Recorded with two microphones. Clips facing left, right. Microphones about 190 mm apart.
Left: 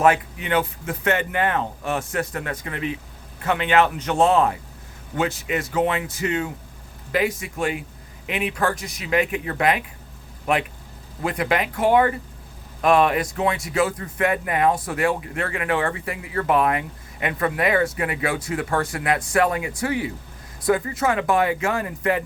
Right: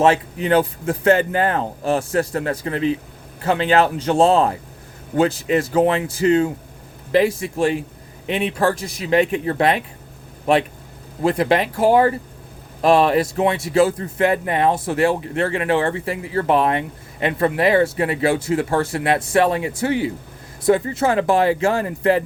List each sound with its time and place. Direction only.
0.0 s a man's voice: 30° right (ahead or behind)